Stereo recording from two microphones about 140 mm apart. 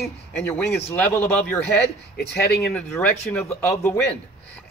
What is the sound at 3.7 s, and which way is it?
Speech, 20° left (ahead or behind).